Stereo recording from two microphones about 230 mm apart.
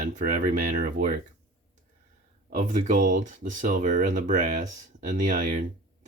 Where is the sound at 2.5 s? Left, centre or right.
Right.